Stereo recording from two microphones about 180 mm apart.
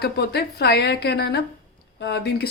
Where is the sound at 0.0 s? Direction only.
65° left (ahead or behind).